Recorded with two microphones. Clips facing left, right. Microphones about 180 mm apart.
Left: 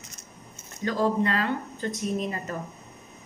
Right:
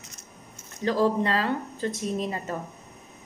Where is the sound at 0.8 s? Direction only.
30° right (ahead or behind).